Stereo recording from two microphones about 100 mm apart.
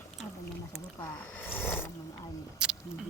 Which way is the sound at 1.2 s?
15° left (ahead or behind).